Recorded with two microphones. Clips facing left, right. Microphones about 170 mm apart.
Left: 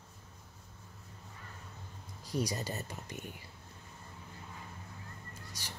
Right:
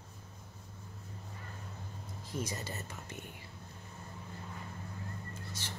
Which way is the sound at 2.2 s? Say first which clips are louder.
Left 4 dB; 35° left (ahead or behind).